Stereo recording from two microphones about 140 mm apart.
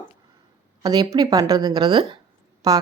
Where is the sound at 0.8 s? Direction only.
25° right (ahead or behind).